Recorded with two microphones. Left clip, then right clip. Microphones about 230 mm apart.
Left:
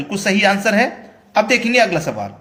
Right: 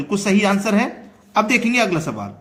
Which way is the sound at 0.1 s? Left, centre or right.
Centre.